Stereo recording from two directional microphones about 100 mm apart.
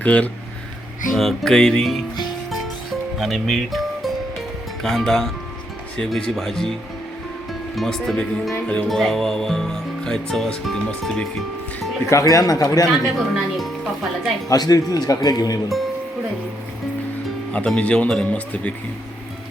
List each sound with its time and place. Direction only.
0.0 s speech: 15° left (ahead or behind)
1.1 s music: 5° left (ahead or behind)
3.2 s speech: centre (ahead or behind)
4.8 s music: 5° left (ahead or behind)
7.8 s music: 5° left (ahead or behind)
12.0 s a man's voice: 30° left (ahead or behind)
13.1 s music: centre (ahead or behind)
14.5 s a man's voice: 40° left (ahead or behind)
17.5 s speech: 10° left (ahead or behind)